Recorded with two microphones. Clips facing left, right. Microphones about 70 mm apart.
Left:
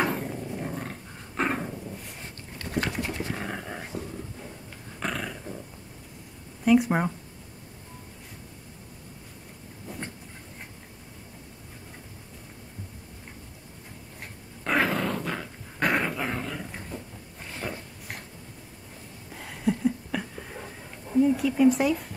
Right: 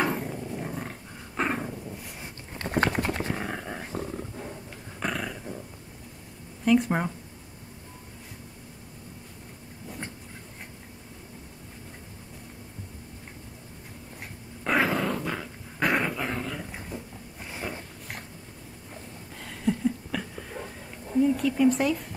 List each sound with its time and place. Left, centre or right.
0.1 s dog: centre
2.6 s a sound: right
3.3 s dog: centre
5.0 s dog: centre
6.6 s speech: centre
14.6 s dog: centre
19.3 s a sound: centre